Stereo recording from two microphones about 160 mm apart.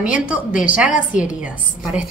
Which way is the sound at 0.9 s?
55° left (ahead or behind).